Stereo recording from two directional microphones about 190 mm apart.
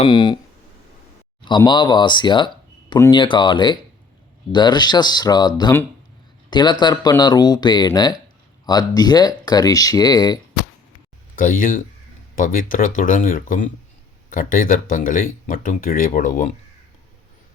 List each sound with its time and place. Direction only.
0.0 s speech: 25° left (ahead or behind)
1.5 s speech: 25° left (ahead or behind)
11.3 s speech: 45° left (ahead or behind)